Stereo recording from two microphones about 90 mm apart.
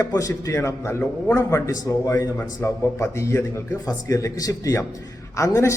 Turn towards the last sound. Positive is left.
turn(degrees=35)  # may be behind; listen again after turning